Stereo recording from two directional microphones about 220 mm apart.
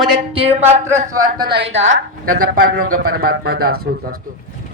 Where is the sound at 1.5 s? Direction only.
50° right (ahead or behind).